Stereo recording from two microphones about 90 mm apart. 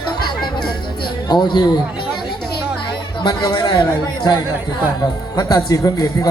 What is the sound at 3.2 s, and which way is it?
Speech, 50° left (ahead or behind).